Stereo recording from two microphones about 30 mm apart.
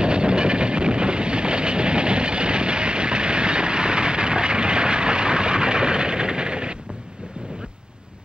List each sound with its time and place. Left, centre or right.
0.0 s train: right